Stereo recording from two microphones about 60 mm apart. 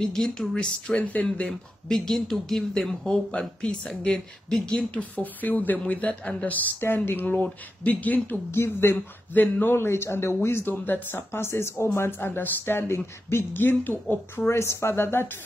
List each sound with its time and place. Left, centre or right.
0.0 s speech: centre
1.5 s speech: centre
5.1 s speech: left
6.8 s speech: left
8.9 s speech: left
14.5 s speech: left